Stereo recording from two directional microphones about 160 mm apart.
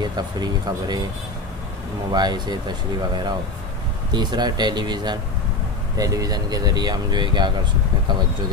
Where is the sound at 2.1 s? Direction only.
25° right (ahead or behind).